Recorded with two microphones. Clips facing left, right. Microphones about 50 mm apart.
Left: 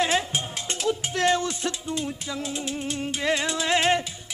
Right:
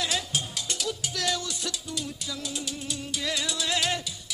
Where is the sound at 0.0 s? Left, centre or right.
Left.